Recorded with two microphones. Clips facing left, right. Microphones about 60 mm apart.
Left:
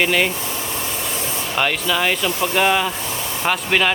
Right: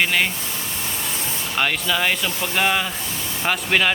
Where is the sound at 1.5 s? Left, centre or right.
Centre.